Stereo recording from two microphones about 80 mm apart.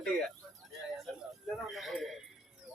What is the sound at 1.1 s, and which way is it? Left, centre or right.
Speech, centre.